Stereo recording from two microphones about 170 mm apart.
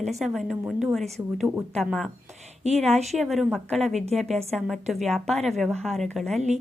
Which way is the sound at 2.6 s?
40° right (ahead or behind).